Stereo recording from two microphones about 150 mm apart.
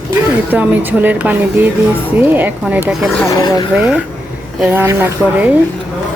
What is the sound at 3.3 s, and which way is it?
Speech, 25° left (ahead or behind).